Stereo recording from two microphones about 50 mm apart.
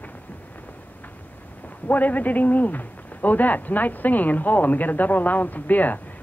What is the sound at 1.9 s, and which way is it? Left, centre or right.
A man's voice, left.